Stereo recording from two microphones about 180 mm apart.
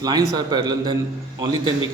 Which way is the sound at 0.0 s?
20° right (ahead or behind).